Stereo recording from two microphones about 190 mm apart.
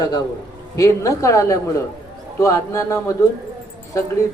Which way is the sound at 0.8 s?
15° left (ahead or behind).